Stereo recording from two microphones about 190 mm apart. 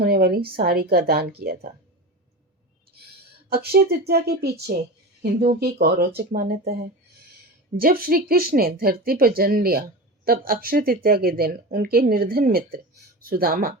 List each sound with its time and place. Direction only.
0.0 s a woman's voice: 55° right (ahead or behind)
3.5 s a woman's voice: 55° right (ahead or behind)
7.8 s speech: 50° right (ahead or behind)